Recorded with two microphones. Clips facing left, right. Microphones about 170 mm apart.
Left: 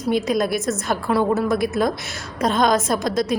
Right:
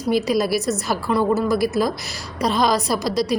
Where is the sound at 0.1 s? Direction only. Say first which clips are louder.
Right 1 dB; centre (ahead or behind).